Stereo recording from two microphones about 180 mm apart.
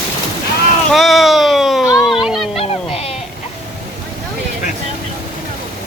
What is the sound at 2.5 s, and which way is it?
Music, 35° left (ahead or behind).